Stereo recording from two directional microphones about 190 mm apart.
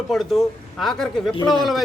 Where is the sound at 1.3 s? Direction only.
25° left (ahead or behind).